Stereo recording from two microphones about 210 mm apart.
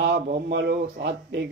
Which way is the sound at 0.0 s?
50° right (ahead or behind).